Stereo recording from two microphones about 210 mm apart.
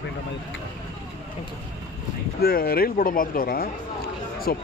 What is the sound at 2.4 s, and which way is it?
Speech, 45° left (ahead or behind).